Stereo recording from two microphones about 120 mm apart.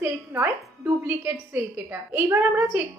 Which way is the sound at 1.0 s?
15° right (ahead or behind).